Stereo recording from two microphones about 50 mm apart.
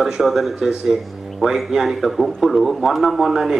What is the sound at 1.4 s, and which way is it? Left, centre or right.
A man's voice, centre.